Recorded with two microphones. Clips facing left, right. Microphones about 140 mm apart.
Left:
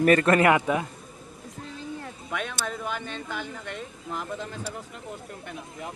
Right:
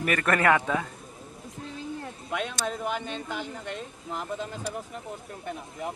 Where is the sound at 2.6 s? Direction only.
15° right (ahead or behind).